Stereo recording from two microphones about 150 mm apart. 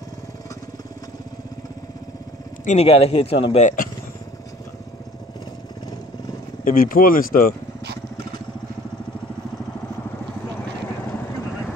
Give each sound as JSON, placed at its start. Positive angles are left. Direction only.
{"t": 2.6, "sound": "speech", "side_deg": 45}
{"t": 3.6, "sound": "speech", "side_deg": 65}
{"t": 6.6, "sound": "speech", "side_deg": 70}